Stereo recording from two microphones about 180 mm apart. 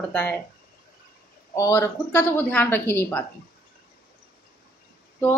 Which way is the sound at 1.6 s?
15° left (ahead or behind).